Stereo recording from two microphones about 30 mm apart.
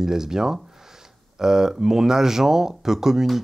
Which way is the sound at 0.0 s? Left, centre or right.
Centre.